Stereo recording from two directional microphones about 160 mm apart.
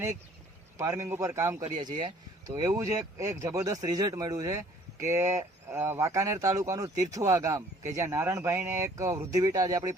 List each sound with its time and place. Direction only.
0.8 s a man's voice: 20° right (ahead or behind)
1.8 s speech: 30° right (ahead or behind)